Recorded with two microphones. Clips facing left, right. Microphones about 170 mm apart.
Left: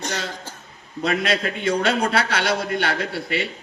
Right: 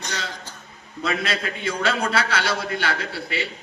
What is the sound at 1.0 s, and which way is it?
A man's voice, 55° left (ahead or behind).